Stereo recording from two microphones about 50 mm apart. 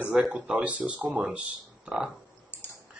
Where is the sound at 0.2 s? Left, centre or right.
Centre.